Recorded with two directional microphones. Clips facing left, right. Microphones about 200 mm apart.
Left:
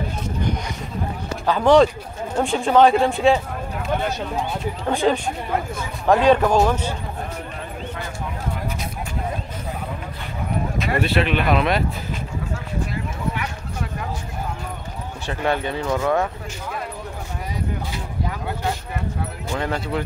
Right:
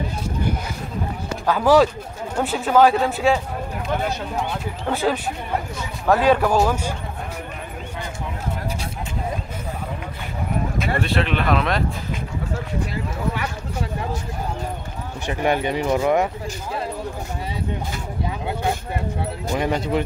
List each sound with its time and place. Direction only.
1.5 s speech: 5° right (ahead or behind)
4.9 s speech: 5° right (ahead or behind)
10.8 s speech: 5° left (ahead or behind)
15.2 s speech: 15° right (ahead or behind)
19.5 s speech: 20° right (ahead or behind)